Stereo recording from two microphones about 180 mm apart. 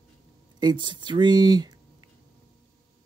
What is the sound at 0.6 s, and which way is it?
Speech, 25° right (ahead or behind).